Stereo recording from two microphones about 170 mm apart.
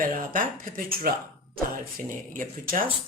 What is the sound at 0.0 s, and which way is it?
Speech, 55° right (ahead or behind).